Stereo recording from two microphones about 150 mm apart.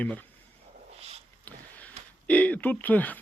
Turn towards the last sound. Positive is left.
turn(degrees=10)  # may be behind; listen again after turning